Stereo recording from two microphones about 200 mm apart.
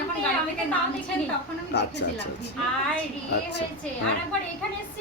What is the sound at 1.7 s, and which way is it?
Speech, 60° left (ahead or behind).